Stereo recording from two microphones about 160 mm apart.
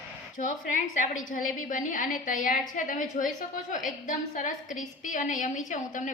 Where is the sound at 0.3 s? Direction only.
55° left (ahead or behind).